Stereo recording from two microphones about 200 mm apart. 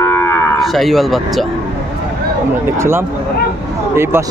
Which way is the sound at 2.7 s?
10° right (ahead or behind).